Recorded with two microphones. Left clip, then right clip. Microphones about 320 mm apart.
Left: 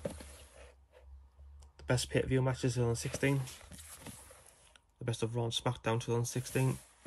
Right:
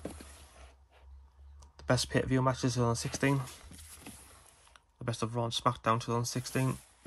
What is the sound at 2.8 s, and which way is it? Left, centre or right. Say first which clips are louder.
Speech: right 3 dB; right.